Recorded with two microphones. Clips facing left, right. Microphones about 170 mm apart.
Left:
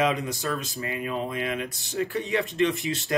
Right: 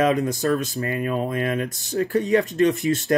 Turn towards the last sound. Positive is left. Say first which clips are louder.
# right 7 dB
turn(degrees=-45)  # may be behind; listen again after turning